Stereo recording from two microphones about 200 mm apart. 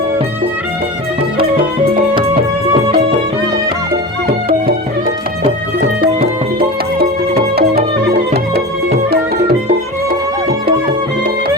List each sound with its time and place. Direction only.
1.4 s music: 50° right (ahead or behind)
2.3 s music: 25° right (ahead or behind)
4.3 s music: 25° right (ahead or behind)
6.0 s music: 50° right (ahead or behind)